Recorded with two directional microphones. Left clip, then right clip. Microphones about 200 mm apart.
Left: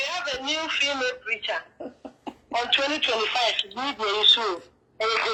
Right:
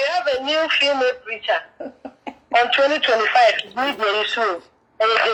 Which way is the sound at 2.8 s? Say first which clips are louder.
Right 8 dB; centre (ahead or behind).